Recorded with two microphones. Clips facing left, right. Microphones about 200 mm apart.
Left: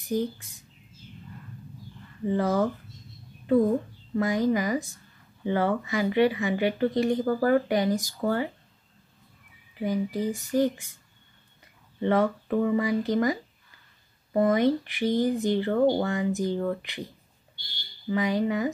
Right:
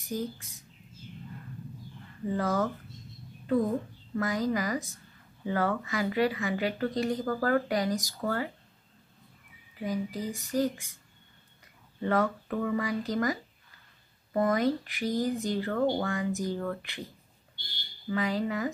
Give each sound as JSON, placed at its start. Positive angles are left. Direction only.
{"t": 0.1, "sound": "speech", "side_deg": 25}
{"t": 2.2, "sound": "speech", "side_deg": 25}
{"t": 4.2, "sound": "speech", "side_deg": 20}
{"t": 9.8, "sound": "speech", "side_deg": 20}
{"t": 12.0, "sound": "speech", "side_deg": 25}
{"t": 18.0, "sound": "speech", "side_deg": 20}